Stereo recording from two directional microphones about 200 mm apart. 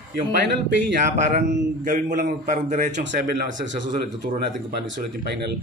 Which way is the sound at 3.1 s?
55° right (ahead or behind).